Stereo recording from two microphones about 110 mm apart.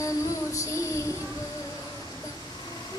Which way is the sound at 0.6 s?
25° left (ahead or behind).